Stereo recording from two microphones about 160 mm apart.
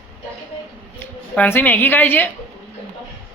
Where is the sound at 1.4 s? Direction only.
10° left (ahead or behind).